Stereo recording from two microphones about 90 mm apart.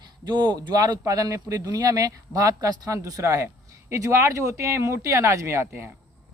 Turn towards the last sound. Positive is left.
turn(degrees=-30)  # may be behind; listen again after turning